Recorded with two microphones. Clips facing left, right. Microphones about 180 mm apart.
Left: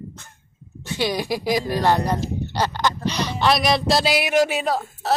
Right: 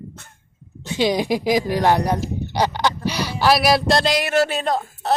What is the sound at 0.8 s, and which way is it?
A woman's voice, 20° right (ahead or behind).